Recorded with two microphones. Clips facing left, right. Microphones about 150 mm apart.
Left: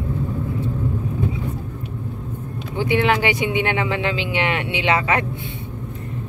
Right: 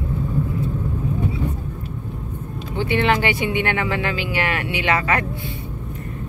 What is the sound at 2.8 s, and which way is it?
Speech, 10° left (ahead or behind).